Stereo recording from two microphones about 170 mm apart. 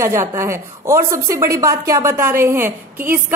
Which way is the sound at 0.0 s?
15° right (ahead or behind).